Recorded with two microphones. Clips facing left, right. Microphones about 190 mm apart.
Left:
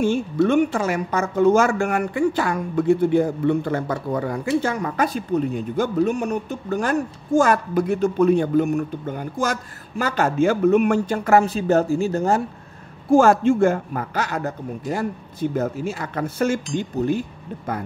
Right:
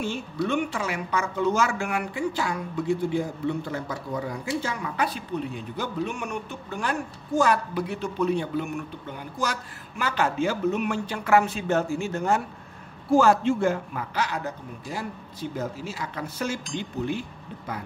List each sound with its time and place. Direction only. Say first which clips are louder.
0.5 s a woman's voice: left 6 dB; 45° left (ahead or behind)
13.1 s a woman's voice: left 5 dB; 50° left (ahead or behind)